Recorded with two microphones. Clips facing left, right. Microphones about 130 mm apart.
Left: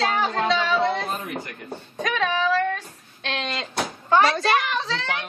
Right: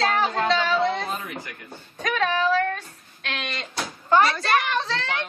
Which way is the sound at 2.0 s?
Centre (ahead or behind).